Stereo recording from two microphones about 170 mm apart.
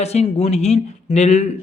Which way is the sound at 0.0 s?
40° left (ahead or behind).